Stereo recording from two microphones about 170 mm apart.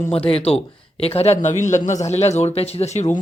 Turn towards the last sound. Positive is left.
turn(degrees=40)  # may be behind; listen again after turning